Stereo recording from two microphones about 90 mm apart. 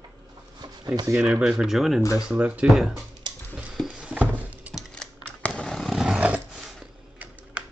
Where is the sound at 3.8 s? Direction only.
15° right (ahead or behind).